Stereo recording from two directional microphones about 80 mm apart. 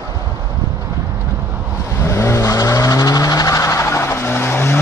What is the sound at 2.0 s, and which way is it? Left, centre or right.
Vehicle, left.